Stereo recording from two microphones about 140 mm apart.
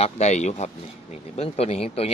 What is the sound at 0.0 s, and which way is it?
A man's voice, 55° left (ahead or behind).